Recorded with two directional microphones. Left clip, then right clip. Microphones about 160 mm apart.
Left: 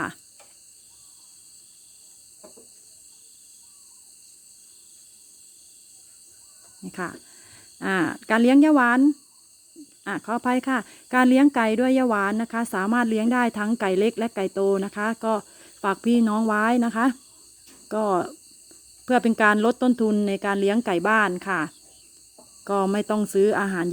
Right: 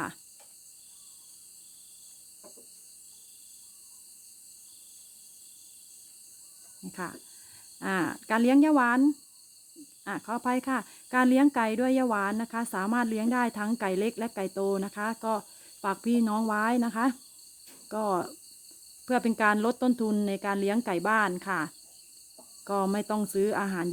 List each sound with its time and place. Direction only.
6.8 s speech: 25° left (ahead or behind)